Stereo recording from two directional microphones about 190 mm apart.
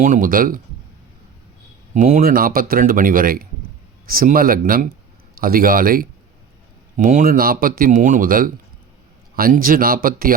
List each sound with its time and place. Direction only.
0.0 s speech: 45° right (ahead or behind)
1.9 s speech: 45° right (ahead or behind)